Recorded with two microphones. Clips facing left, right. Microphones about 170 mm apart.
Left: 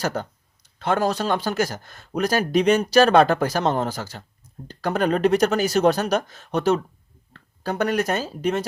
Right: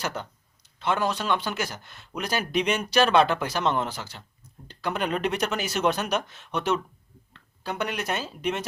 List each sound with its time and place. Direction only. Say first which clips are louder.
0.0 s speech: left 6 dB; 40° left (ahead or behind)